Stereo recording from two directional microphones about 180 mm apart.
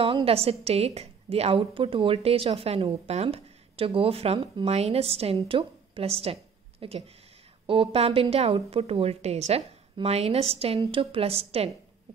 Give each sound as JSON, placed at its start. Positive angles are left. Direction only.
{"t": 0.0, "sound": "a woman's voice", "side_deg": -30}